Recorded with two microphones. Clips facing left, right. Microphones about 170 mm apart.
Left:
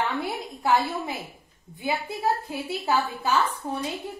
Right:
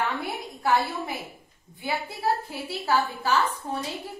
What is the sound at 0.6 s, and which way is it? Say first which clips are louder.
A woman's voice: left 1 dB; 20° left (ahead or behind).